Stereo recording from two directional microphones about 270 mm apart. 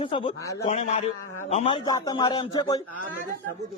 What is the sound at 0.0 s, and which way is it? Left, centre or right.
A man's voice, centre.